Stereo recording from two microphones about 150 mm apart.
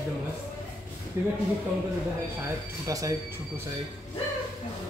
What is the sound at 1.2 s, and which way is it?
Speech, 20° right (ahead or behind).